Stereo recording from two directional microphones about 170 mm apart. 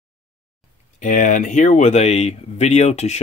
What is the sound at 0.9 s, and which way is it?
Speech, 50° left (ahead or behind).